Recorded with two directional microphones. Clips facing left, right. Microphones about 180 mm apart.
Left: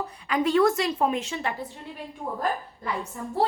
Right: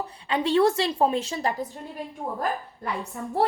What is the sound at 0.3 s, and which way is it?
Speech, 30° right (ahead or behind).